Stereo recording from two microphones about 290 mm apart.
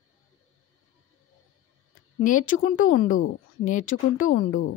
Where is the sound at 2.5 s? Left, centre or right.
Left.